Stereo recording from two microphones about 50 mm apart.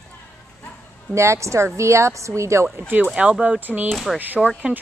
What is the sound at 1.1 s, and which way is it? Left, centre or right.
A woman's voice, right.